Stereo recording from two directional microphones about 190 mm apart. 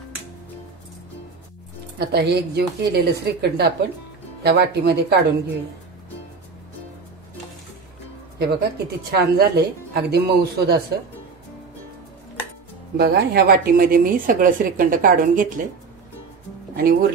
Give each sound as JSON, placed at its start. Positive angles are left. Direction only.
{"t": 2.0, "sound": "speech", "side_deg": -60}
{"t": 8.4, "sound": "speech", "side_deg": -60}
{"t": 12.9, "sound": "a woman's voice", "side_deg": -55}
{"t": 16.7, "sound": "a woman's voice", "side_deg": -50}